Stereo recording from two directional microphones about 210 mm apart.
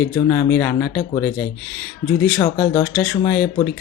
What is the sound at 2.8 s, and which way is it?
Speech, 5° left (ahead or behind).